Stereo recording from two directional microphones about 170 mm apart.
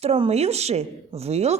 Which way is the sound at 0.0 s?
35° right (ahead or behind).